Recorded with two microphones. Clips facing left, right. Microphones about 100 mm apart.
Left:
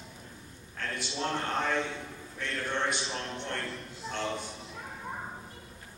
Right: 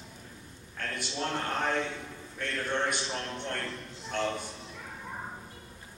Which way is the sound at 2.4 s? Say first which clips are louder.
Right 1 dB; 50° right (ahead or behind).